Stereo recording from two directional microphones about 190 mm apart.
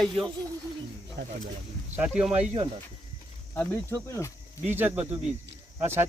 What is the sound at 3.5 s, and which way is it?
Speech, 10° left (ahead or behind).